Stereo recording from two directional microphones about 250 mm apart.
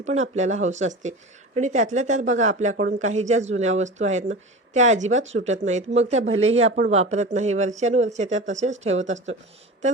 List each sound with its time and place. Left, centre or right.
0.0 s speech: right